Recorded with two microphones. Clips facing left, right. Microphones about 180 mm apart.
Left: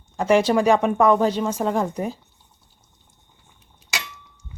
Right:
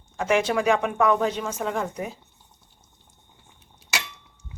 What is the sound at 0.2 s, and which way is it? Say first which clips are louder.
Speech: left 5 dB; 35° left (ahead or behind).